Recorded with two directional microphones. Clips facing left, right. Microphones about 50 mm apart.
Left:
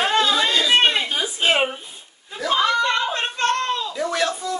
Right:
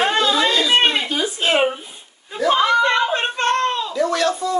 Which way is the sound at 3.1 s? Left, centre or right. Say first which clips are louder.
Right 3 dB; right.